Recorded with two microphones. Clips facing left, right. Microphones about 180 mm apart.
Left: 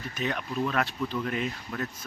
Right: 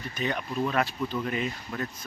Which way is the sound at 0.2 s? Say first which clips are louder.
Right 1 dB; centre (ahead or behind).